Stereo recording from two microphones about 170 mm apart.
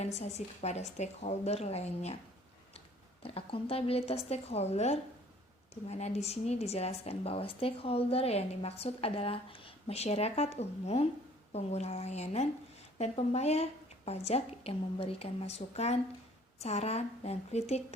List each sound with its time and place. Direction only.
0.2 s a woman's voice: 40° left (ahead or behind)
3.2 s a woman's voice: 35° left (ahead or behind)